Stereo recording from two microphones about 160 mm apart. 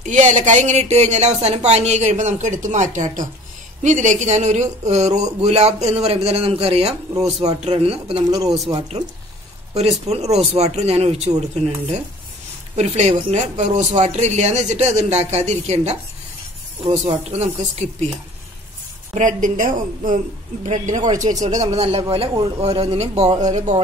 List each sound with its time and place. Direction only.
0.0 s speech: 50° right (ahead or behind)
8.3 s a man's voice: 20° right (ahead or behind)
8.6 s speech: 35° right (ahead or behind)
17.3 s speech: 45° right (ahead or behind)
19.1 s speech: 55° right (ahead or behind)
21.7 s speech: 40° right (ahead or behind)